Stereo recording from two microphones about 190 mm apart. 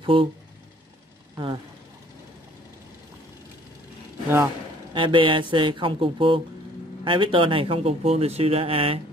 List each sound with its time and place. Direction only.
0.0 s speech: 25° right (ahead or behind)
1.3 s speech: 25° right (ahead or behind)
4.9 s speech: 25° right (ahead or behind)